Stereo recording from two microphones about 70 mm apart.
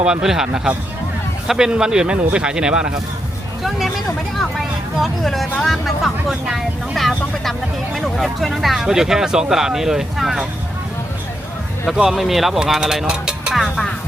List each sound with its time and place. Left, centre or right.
0.0 s speech: centre
3.6 s vehicle: centre
4.9 s speech: centre
12.0 s speech: centre